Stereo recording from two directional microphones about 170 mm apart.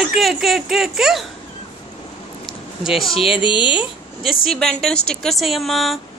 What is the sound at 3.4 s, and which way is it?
Speech, 30° left (ahead or behind).